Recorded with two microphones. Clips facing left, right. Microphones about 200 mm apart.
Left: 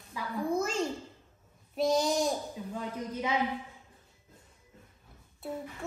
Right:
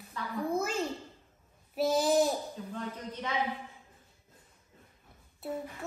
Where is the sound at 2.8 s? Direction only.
10° left (ahead or behind).